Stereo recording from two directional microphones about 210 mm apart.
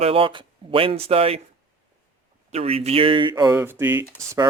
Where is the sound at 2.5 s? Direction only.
30° right (ahead or behind).